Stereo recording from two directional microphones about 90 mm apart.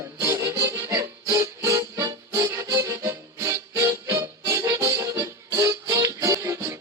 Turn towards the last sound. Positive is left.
turn(degrees=-35)  # may be behind; listen again after turning